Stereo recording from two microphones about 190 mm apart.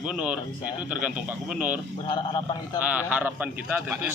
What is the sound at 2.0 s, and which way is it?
Speech, 25° left (ahead or behind).